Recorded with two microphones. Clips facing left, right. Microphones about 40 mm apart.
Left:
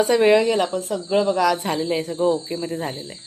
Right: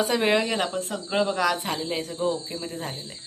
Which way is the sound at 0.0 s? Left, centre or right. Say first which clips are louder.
Left 7 dB; centre.